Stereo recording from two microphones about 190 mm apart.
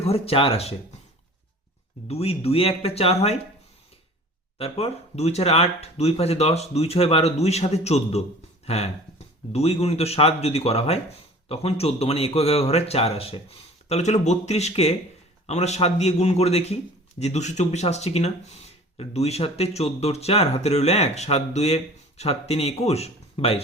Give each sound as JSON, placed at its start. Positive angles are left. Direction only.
{"t": 0.0, "sound": "speech", "side_deg": 30}
{"t": 2.0, "sound": "speech", "side_deg": 30}
{"t": 4.5, "sound": "speech", "side_deg": 30}